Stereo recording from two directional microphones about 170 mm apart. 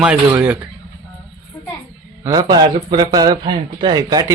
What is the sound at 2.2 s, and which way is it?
Speech, 20° right (ahead or behind).